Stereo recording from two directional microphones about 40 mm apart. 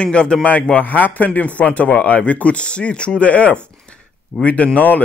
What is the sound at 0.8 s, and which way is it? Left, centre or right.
Speech, left.